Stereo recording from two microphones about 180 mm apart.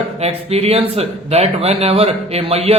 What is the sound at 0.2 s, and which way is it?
Speech, 35° right (ahead or behind).